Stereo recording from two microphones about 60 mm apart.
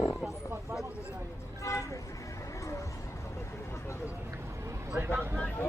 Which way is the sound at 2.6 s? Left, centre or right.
Left.